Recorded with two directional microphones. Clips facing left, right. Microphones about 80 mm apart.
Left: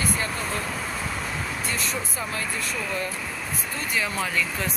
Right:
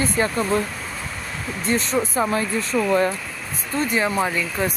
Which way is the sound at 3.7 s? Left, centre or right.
Right.